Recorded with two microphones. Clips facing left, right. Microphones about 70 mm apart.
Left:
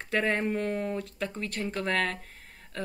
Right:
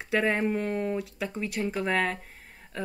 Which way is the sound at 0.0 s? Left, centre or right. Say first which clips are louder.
Right 2 dB; centre.